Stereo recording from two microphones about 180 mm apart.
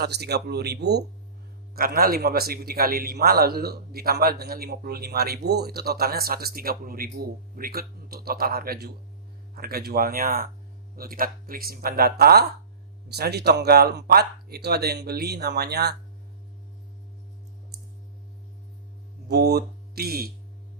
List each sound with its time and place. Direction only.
0.0 s a man's voice: 65° right (ahead or behind)
1.7 s a man's voice: 55° right (ahead or behind)
17.7 s clicking: 60° right (ahead or behind)
19.3 s speech: 65° right (ahead or behind)